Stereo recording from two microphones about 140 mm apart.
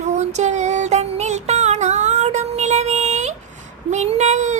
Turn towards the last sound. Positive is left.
turn(degrees=-55)  # may be behind; listen again after turning